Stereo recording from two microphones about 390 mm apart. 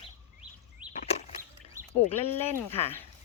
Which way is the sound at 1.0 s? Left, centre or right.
Centre.